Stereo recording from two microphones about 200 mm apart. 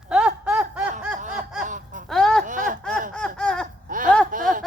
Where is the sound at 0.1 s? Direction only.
5° right (ahead or behind).